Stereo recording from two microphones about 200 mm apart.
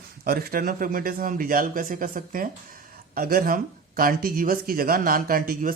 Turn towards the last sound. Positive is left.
turn(degrees=-45)  # may be behind; listen again after turning